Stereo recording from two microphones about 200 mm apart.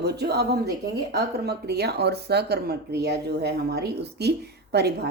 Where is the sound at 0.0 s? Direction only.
55° right (ahead or behind).